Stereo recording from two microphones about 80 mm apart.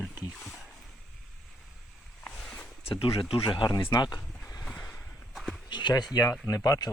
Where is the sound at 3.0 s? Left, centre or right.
Left.